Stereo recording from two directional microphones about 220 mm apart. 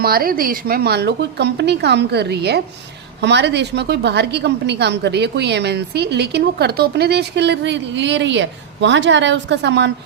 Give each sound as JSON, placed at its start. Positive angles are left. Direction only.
{"t": 0.0, "sound": "a woman's voice", "side_deg": -40}